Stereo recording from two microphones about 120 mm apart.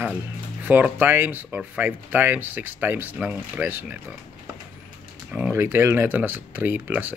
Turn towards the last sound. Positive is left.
turn(degrees=-15)  # may be behind; listen again after turning